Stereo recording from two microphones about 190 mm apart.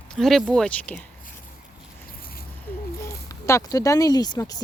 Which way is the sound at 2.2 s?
50° left (ahead or behind).